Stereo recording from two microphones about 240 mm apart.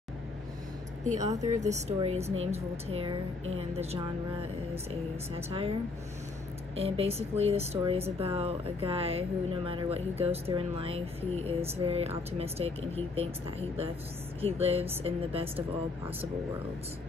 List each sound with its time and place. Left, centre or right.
1.0 s speech: right
6.8 s speech: right